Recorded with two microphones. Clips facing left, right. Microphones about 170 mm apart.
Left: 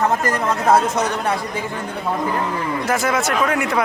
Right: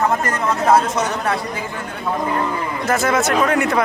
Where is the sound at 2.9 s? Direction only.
10° left (ahead or behind).